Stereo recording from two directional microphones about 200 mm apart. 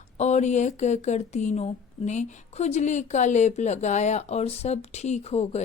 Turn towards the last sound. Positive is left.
turn(degrees=30)  # may be behind; listen again after turning